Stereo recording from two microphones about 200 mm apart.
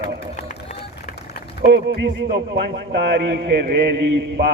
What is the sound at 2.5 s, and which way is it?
A man's voice, 55° right (ahead or behind).